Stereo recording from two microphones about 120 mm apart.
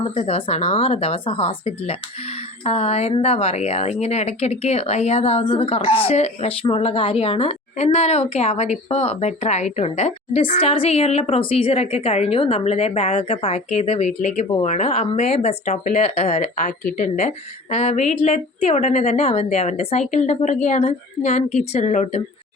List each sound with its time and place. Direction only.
0.0 s a woman's voice: 55° left (ahead or behind); by 22.2 s 70° left (ahead or behind)